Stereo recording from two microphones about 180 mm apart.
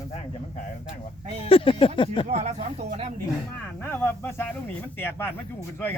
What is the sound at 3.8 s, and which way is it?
Speech, 15° left (ahead or behind).